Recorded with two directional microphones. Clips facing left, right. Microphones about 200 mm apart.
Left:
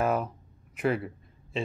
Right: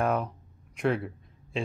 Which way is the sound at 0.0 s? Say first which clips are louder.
Even; 5° left (ahead or behind).